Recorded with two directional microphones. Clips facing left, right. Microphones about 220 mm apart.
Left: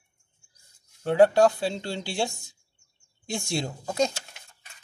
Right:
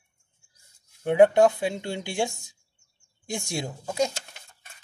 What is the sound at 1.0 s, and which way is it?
Speech, 20° right (ahead or behind).